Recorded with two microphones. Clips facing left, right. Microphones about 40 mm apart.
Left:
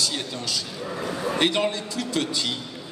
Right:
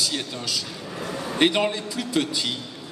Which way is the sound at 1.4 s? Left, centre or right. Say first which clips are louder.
Right 3 dB; centre.